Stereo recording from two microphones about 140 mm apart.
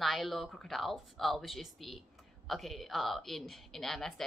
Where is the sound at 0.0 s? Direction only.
Centre (ahead or behind).